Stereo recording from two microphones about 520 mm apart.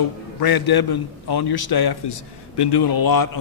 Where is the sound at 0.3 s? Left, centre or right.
Left.